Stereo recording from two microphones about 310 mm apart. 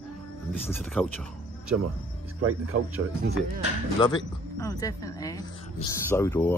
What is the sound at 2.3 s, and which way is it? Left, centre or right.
Speech, right.